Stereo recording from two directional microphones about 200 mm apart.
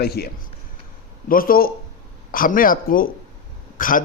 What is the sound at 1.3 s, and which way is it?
A man's voice, 45° left (ahead or behind).